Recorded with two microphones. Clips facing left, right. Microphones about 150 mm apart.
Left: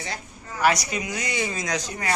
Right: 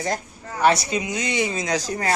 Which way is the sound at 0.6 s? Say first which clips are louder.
Right 3 dB; 25° right (ahead or behind).